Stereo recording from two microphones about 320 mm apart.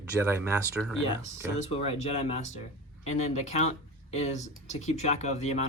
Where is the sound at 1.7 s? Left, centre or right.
Centre.